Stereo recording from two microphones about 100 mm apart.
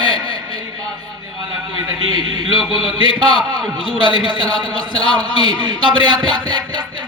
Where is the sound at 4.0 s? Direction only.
55° right (ahead or behind).